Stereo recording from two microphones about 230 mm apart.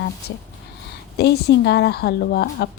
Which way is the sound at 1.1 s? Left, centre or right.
Left.